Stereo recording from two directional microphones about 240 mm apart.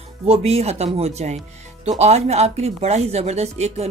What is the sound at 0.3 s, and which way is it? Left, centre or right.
Speech, right.